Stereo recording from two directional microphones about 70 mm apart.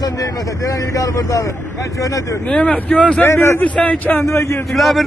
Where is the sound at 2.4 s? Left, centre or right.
Centre.